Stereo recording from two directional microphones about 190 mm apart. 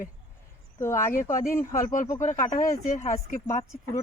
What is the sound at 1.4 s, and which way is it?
A woman's voice, 40° left (ahead or behind).